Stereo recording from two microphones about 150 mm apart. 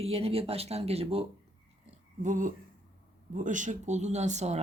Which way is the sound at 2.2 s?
60° right (ahead or behind).